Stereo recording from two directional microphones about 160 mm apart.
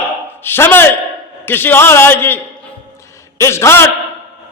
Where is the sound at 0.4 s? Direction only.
15° left (ahead or behind).